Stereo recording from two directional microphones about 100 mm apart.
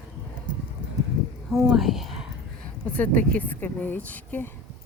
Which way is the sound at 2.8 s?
15° left (ahead or behind).